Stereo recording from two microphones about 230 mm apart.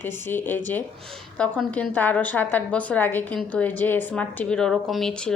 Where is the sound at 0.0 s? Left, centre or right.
Centre.